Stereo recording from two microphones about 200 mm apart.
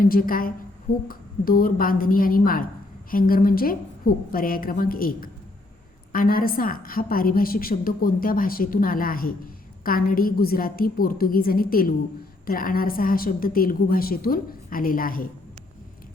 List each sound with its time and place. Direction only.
0.0 s a woman's voice: 45° left (ahead or behind)